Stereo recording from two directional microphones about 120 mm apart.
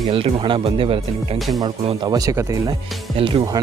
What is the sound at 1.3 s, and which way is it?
Speech, centre (ahead or behind).